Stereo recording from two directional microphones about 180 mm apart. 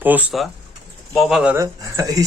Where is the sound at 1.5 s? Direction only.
15° right (ahead or behind).